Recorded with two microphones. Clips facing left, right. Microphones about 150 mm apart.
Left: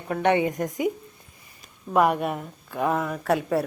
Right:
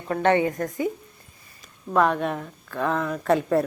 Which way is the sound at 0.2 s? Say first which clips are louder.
Right 1 dB; 15° left (ahead or behind).